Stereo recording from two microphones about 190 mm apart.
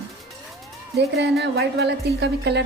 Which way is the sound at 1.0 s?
60° right (ahead or behind).